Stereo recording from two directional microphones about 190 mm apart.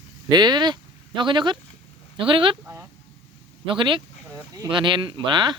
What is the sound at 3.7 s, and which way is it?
Speech, 25° right (ahead or behind).